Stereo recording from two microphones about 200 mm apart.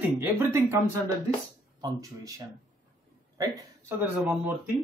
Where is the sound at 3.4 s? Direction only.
10° right (ahead or behind).